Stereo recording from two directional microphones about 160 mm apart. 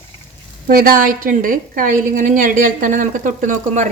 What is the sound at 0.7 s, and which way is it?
A woman's voice, 65° right (ahead or behind).